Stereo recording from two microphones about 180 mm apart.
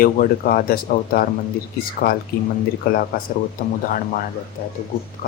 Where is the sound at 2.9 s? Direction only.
55° left (ahead or behind).